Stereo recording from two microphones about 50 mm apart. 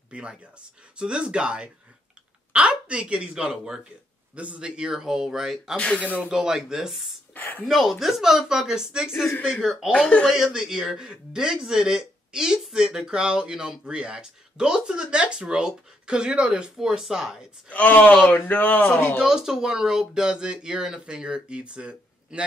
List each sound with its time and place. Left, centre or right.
0.1 s speech: right
5.8 s speech: left
6.3 s speech: centre
7.3 s speech: left
7.6 s speech: centre
9.4 s speech: centre
9.9 s speech: left
10.2 s speech: centre
16.7 s speech: centre
17.6 s speech: left
19.1 s speech: centre